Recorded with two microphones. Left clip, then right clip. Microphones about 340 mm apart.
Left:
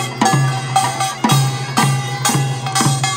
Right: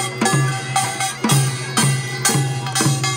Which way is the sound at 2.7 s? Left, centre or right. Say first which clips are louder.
Left 3 dB; centre.